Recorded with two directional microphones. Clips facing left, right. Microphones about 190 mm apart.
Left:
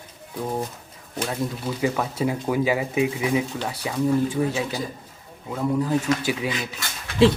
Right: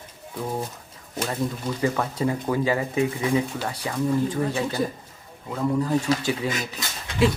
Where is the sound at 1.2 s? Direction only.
5° left (ahead or behind).